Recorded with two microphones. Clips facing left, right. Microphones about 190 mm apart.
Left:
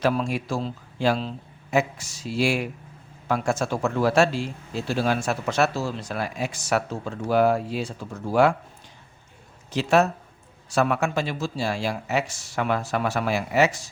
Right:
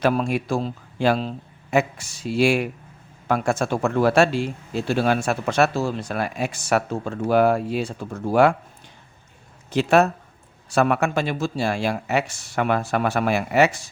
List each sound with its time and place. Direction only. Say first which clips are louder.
0.0 s speech: right 3 dB; 55° right (ahead or behind)
9.7 s speech: right 3 dB; 55° right (ahead or behind)